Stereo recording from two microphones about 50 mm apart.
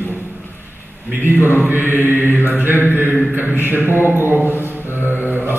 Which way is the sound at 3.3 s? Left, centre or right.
Right.